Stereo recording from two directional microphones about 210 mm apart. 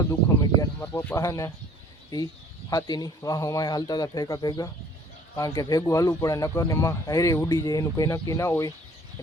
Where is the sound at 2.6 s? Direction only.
15° left (ahead or behind).